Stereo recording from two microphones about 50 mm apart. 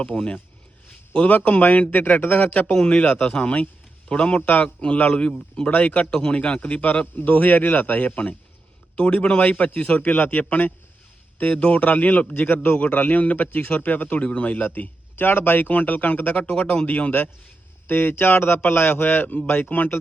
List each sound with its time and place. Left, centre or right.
0.1 s speech: centre
1.3 s a man's voice: left
2.7 s speech: left
4.4 s a man's voice: left
7.3 s a man's voice: left
9.4 s a man's voice: left
11.3 s a man's voice: left
12.3 s a man's voice: left
14.2 s speech: left
14.6 s a man's voice: left
19.7 s a man's voice: left